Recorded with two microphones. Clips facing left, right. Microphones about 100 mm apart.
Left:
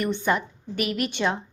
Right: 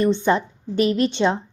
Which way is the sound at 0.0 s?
25° right (ahead or behind).